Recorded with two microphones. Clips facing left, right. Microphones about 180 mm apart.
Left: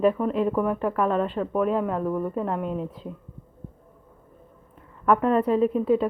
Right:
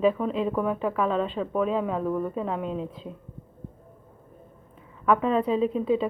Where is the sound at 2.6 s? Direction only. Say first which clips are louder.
Left 2 dB; 20° right (ahead or behind).